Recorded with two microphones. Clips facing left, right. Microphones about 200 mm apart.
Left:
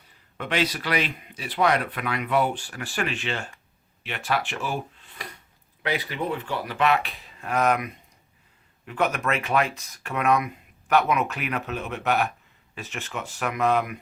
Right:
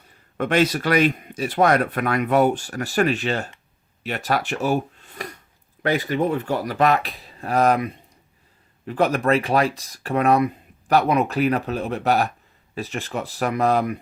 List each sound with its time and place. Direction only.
0.3 s speech: 45° right (ahead or behind)